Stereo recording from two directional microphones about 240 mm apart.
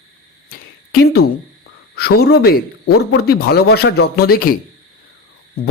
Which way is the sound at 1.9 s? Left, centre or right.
Left.